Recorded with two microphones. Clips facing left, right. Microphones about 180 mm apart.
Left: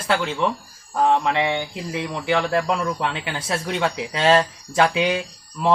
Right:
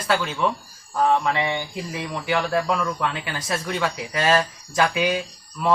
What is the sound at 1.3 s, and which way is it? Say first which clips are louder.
Speech: left 3 dB; 20° left (ahead or behind).